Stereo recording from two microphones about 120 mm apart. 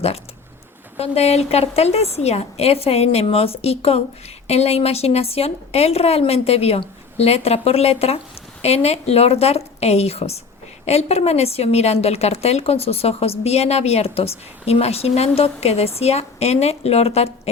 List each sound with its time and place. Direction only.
0.9 s a woman's voice: 60° left (ahead or behind)